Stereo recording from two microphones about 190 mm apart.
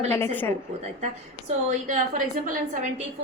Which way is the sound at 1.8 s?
40° right (ahead or behind).